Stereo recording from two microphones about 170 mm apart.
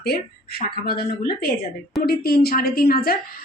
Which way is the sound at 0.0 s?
65° left (ahead or behind).